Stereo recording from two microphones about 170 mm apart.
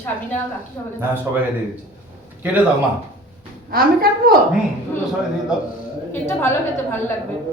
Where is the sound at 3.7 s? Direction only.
60° right (ahead or behind).